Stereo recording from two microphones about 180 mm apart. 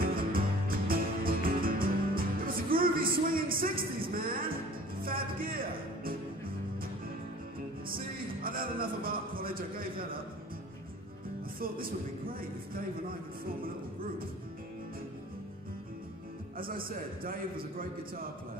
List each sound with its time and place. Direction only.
0.0 s music: 55° right (ahead or behind)
7.9 s music: 55° right (ahead or behind)
11.6 s a man's voice: 55° right (ahead or behind)
16.5 s a man's voice: 55° right (ahead or behind)